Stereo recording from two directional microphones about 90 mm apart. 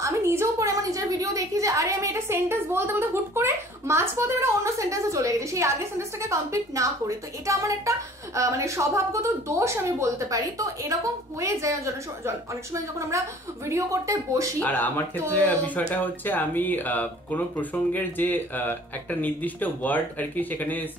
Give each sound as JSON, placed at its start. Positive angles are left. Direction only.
{"t": 0.0, "sound": "a sound", "side_deg": -30}
{"t": 8.4, "sound": "speech", "side_deg": -35}
{"t": 13.7, "sound": "speech", "side_deg": -35}
{"t": 14.6, "sound": "speech", "side_deg": 20}